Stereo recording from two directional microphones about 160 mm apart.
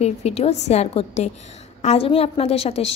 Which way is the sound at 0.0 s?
40° left (ahead or behind).